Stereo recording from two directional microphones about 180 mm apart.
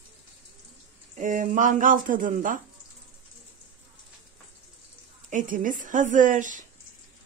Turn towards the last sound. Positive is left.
turn(degrees=-45)  # may be behind; listen again after turning